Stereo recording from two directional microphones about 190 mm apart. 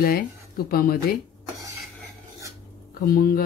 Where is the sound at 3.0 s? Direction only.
50° left (ahead or behind).